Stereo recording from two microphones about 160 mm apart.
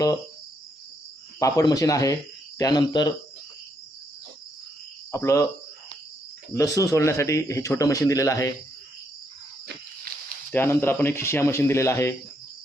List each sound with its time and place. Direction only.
1.4 s a man's voice: 20° left (ahead or behind)
5.1 s speech: 20° left (ahead or behind)
6.5 s a man's voice: 20° left (ahead or behind)
9.6 s a sound: 70° right (ahead or behind)
10.5 s speech: 15° left (ahead or behind)